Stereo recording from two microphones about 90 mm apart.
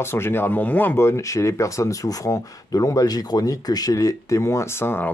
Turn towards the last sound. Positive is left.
turn(degrees=25)  # may be behind; listen again after turning